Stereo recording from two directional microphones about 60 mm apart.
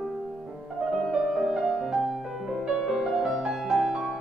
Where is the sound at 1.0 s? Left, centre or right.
Centre.